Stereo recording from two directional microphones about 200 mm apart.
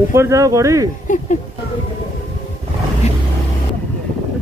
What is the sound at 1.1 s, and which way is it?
Speech, 40° left (ahead or behind).